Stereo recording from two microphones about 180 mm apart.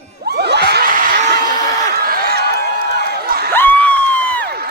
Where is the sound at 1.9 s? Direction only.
55° right (ahead or behind).